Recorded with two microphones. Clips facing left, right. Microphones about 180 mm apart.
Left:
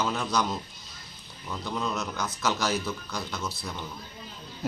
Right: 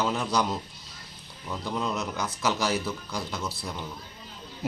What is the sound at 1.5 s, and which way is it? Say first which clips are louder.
Speech: right 1 dB; 10° right (ahead or behind).